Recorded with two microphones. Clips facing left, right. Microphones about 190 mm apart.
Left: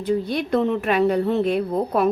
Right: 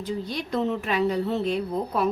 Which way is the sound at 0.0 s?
60° left (ahead or behind).